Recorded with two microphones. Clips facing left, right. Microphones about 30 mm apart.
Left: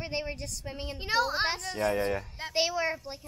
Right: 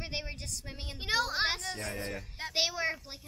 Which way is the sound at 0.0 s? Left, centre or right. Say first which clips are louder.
Left 5 dB; centre.